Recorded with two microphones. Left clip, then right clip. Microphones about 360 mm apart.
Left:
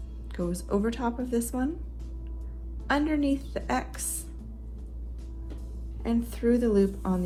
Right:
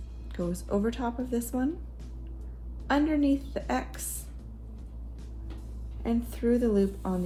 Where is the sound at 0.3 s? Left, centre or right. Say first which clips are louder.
Left 1 dB; centre.